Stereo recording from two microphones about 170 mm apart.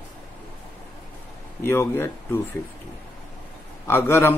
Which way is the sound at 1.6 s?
15° left (ahead or behind).